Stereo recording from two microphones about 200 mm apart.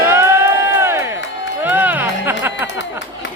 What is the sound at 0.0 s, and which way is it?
Music, 10° right (ahead or behind).